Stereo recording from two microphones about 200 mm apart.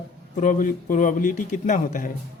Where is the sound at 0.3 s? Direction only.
40° left (ahead or behind).